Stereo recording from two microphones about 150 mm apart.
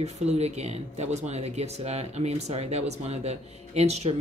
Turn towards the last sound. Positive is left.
turn(degrees=-45)  # may be behind; listen again after turning